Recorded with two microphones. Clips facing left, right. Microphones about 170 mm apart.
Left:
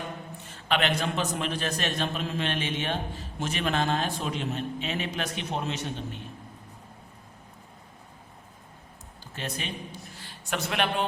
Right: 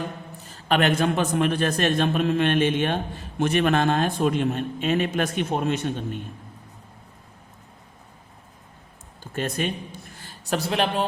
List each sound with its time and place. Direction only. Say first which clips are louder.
0.3 s a man's voice: right 5 dB; 35° right (ahead or behind)
9.2 s a man's voice: right 9 dB; 50° right (ahead or behind); by 11.0 s 35° right (ahead or behind)